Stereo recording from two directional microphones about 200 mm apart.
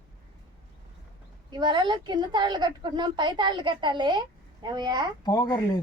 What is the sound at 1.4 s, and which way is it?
A woman's voice, 20° right (ahead or behind).